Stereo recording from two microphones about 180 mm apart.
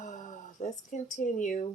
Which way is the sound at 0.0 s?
45° left (ahead or behind).